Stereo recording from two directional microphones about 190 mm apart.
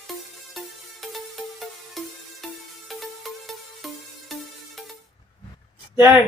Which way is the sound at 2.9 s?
Centre (ahead or behind).